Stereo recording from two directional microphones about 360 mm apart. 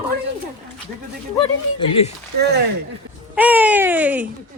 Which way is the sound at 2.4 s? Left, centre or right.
Right.